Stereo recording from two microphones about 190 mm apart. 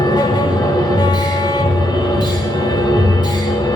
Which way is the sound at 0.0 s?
20° left (ahead or behind).